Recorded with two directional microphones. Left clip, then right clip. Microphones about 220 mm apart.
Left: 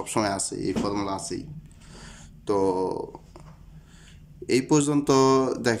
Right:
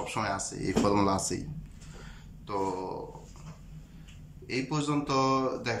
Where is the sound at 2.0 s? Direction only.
30° left (ahead or behind).